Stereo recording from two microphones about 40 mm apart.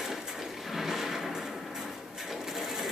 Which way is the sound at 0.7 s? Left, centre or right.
Centre.